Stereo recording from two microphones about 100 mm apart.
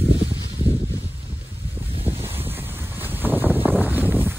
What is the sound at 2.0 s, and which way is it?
Wind noise, 20° right (ahead or behind).